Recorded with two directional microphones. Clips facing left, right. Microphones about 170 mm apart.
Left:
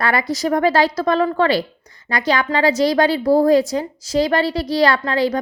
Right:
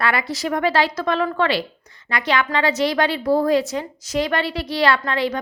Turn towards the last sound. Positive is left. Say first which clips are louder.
# left 2 dB
turn(degrees=35)  # may be behind; listen again after turning